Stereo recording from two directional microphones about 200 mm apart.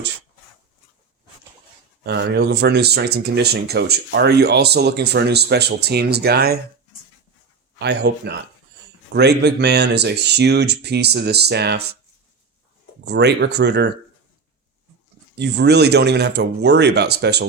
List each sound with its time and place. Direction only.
2.0 s speech: 55° right (ahead or behind)
7.8 s speech: 55° right (ahead or behind)
13.1 s speech: 60° right (ahead or behind)
15.4 s speech: 55° right (ahead or behind)